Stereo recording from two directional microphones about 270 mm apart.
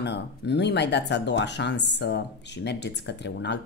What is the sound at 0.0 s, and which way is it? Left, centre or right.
Speech, left.